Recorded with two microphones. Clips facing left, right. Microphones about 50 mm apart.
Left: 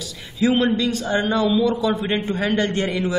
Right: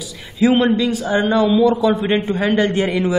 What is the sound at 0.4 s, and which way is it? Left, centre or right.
A man's voice, centre.